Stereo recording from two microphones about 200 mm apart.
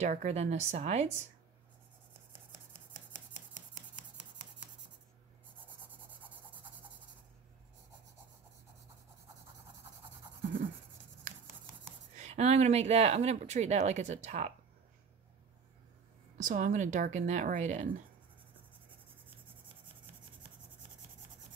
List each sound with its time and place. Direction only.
0.0 s speech: 35° right (ahead or behind)
12.2 s speech: 35° right (ahead or behind)
16.3 s speech: 40° right (ahead or behind)